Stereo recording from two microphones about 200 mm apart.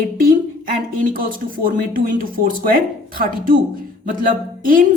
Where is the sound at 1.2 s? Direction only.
45° right (ahead or behind).